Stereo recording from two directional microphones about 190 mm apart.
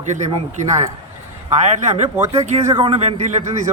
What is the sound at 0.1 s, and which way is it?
Speech, 40° right (ahead or behind).